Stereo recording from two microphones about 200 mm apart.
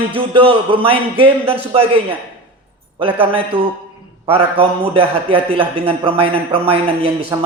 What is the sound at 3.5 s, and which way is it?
A man's voice, 25° right (ahead or behind).